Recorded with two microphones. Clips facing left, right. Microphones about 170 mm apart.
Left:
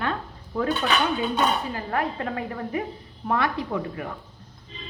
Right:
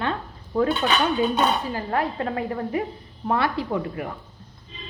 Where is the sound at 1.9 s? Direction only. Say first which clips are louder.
Right 2 dB; 30° right (ahead or behind).